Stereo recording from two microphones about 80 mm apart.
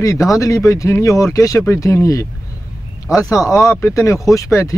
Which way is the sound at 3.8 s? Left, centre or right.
Left.